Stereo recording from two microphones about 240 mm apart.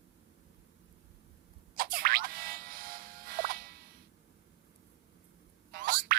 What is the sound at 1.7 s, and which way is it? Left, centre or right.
Music, right.